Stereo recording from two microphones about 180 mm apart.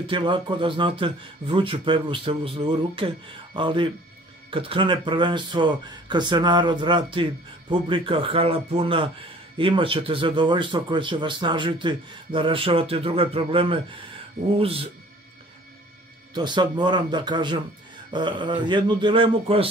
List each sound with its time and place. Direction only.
0.0 s speech: 30° right (ahead or behind)
16.3 s speech: 25° right (ahead or behind)